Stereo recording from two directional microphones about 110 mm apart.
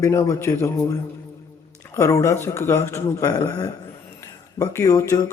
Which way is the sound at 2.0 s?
30° left (ahead or behind).